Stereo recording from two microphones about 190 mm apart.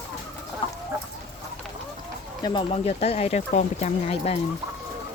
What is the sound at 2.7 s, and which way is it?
Speech, 35° left (ahead or behind).